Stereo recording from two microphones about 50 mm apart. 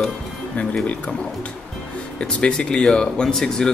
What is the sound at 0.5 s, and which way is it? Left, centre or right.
Speech, left.